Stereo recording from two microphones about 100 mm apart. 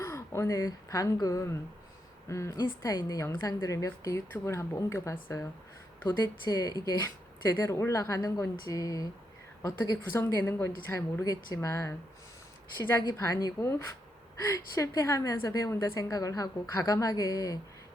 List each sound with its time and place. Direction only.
0.0 s speech: 30° left (ahead or behind)
2.6 s a woman's voice: 40° left (ahead or behind)
6.1 s a woman's voice: 40° left (ahead or behind)
13.1 s a woman's voice: 35° left (ahead or behind)